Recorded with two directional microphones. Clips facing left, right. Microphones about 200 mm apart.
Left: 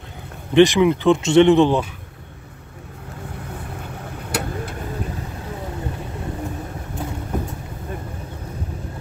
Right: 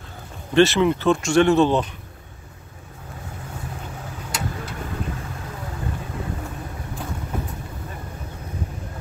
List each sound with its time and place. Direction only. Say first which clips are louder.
0.6 s speech: left 3 dB; 15° left (ahead or behind)
4.3 s vehicle: left 5 dB; 55° left (ahead or behind)